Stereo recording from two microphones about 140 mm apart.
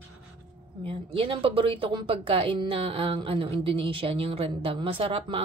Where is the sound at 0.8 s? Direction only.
40° right (ahead or behind).